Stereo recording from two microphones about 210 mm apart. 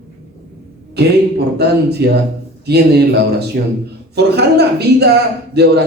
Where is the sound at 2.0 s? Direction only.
50° right (ahead or behind).